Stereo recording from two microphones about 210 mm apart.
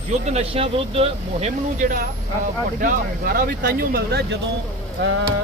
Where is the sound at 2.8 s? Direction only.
40° right (ahead or behind).